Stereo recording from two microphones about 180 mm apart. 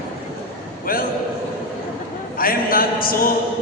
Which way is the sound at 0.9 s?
55° left (ahead or behind).